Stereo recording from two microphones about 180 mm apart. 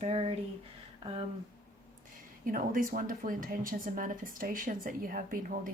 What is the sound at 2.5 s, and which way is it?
Speech, 50° right (ahead or behind).